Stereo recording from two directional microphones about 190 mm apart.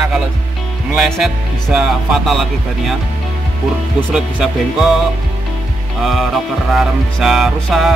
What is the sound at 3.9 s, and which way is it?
Speech, 5° right (ahead or behind).